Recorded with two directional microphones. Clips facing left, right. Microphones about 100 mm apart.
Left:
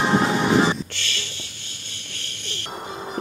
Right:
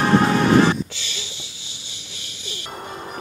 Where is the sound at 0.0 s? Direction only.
15° left (ahead or behind).